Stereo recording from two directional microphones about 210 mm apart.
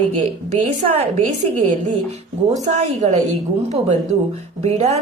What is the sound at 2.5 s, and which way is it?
A woman's voice, 35° right (ahead or behind).